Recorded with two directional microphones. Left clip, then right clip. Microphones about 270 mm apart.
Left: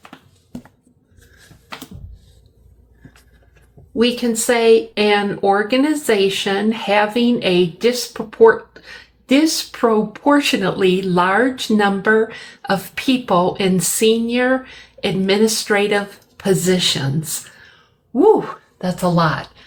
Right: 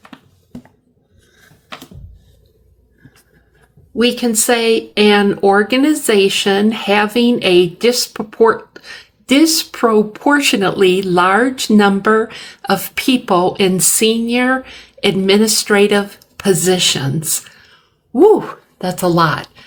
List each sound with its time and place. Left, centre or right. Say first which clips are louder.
3.9 s speech: right 3 dB; right
18.1 s a woman's voice: right 3 dB; right